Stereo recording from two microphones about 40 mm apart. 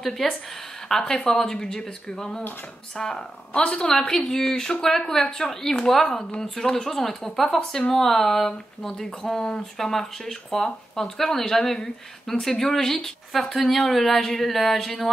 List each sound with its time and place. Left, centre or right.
0.2 s speech: centre
0.8 s speech: centre
3.5 s a woman's voice: left; by 15.0 s centre